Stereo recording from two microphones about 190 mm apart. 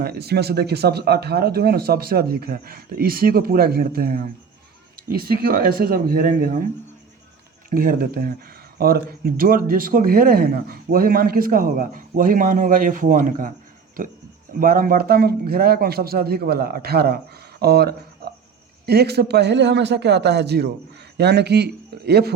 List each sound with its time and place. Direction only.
0.0 s speech: 55° right (ahead or behind)
7.7 s speech: 50° right (ahead or behind)
14.6 s a man's voice: 50° right (ahead or behind)